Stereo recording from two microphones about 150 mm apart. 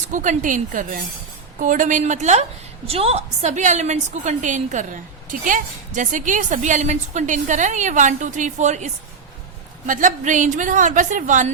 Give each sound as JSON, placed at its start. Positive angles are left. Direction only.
{"t": 0.1, "sound": "a woman's voice", "side_deg": -55}
{"t": 2.8, "sound": "a woman's voice", "side_deg": -40}